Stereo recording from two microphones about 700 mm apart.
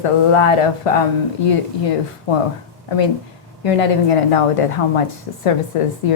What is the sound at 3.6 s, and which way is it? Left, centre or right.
A woman's voice, left.